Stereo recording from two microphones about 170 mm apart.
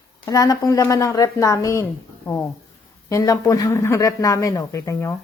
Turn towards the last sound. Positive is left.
turn(degrees=20)  # may be behind; listen again after turning